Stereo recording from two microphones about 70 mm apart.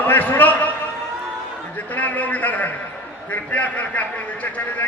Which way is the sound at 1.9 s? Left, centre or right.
Left.